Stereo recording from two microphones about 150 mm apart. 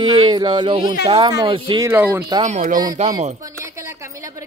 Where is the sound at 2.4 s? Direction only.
55° right (ahead or behind).